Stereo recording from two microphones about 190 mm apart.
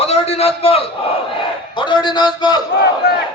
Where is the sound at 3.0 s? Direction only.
55° left (ahead or behind).